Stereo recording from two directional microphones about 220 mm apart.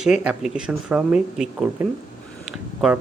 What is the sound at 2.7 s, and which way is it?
Speech, 5° right (ahead or behind).